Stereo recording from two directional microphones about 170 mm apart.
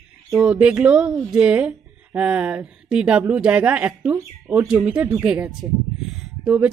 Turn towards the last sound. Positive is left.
turn(degrees=-5)  # may be behind; listen again after turning